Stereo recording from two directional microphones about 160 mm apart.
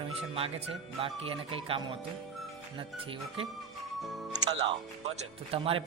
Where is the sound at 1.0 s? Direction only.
35° right (ahead or behind).